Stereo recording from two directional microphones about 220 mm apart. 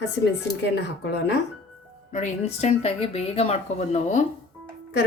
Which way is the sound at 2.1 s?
30° left (ahead or behind).